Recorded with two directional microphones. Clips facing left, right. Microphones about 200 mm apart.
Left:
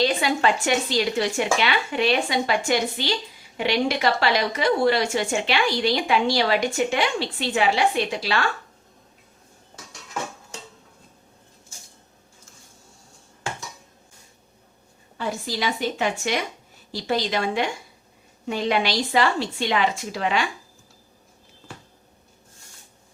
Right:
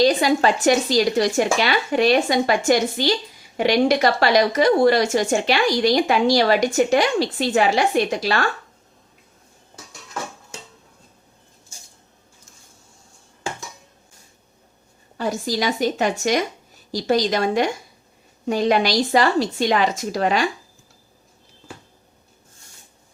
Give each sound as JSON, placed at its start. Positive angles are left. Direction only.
{"t": 0.0, "sound": "a woman's voice", "side_deg": -40}
{"t": 15.2, "sound": "speech", "side_deg": -40}